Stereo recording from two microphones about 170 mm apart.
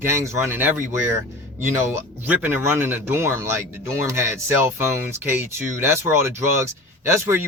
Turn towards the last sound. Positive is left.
turn(degrees=-15)  # may be behind; listen again after turning